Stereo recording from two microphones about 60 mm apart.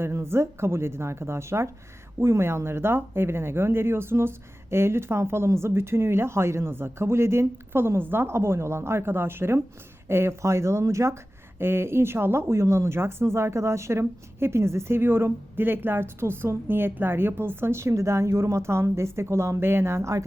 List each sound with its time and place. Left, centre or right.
0.0 s speech: right
11.6 s speech: right
14.0 s speech: right